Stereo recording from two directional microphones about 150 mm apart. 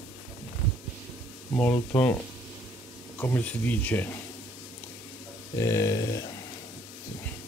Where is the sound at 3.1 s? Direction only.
10° left (ahead or behind).